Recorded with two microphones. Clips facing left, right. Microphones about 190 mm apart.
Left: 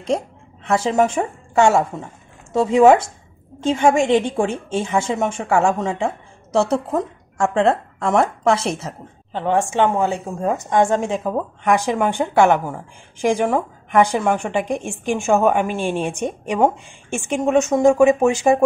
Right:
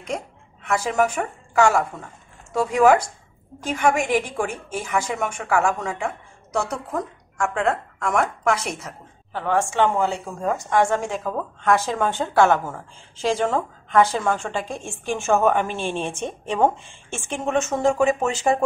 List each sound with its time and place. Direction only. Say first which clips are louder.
0.7 s a woman's voice: left 4 dB; 25° left (ahead or behind)